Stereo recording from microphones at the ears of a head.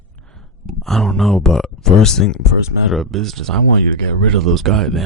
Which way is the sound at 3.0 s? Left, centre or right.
Right.